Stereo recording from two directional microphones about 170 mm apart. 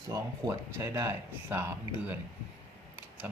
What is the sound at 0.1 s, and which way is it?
Speech, 20° right (ahead or behind).